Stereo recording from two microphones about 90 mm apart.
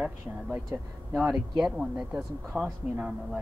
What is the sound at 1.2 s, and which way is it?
Speech, 5° right (ahead or behind).